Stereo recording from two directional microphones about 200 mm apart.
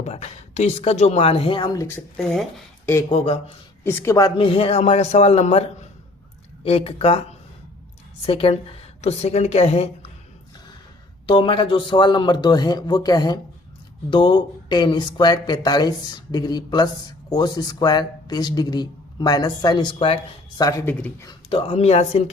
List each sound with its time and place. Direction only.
0.0 s speech: 35° left (ahead or behind)
2.1 s speech: centre (ahead or behind)
3.1 s speech: 30° left (ahead or behind)
3.8 s speech: 15° left (ahead or behind)
4.4 s speech: 25° left (ahead or behind)
8.3 s speech: 30° left (ahead or behind)
11.3 s speech: 25° left (ahead or behind)
21.5 s speech: 30° left (ahead or behind)